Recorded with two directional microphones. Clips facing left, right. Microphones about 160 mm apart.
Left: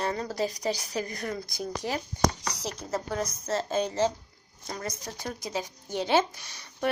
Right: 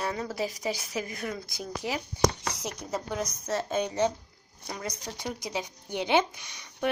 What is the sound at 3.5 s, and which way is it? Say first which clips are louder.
Speech: left 1 dB; 30° left (ahead or behind).